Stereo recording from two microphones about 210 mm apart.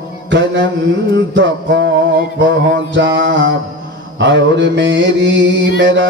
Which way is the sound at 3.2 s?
55° right (ahead or behind).